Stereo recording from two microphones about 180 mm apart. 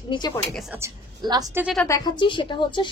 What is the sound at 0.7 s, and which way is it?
Speech, 20° right (ahead or behind).